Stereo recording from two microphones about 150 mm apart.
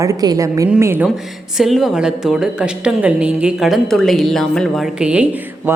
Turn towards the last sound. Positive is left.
turn(degrees=-10)  # may be behind; listen again after turning